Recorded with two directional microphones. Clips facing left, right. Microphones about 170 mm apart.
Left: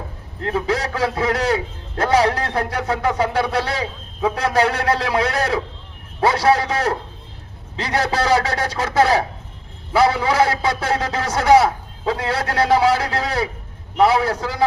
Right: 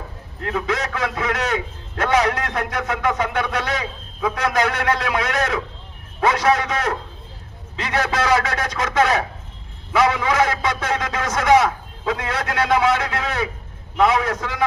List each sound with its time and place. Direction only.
0.4 s a man's voice: 35° left (ahead or behind)